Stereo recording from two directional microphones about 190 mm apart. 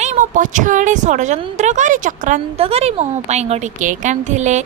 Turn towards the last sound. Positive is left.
turn(degrees=-40)  # may be behind; listen again after turning